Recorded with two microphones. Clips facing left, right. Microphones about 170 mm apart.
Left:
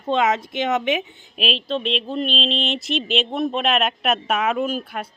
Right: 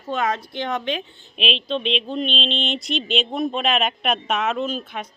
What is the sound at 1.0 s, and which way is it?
Speech, 5° left (ahead or behind).